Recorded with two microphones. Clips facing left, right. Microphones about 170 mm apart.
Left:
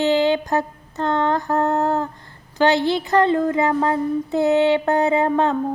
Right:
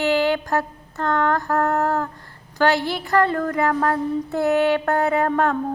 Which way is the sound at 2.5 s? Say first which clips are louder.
Left 3 dB; 20° left (ahead or behind).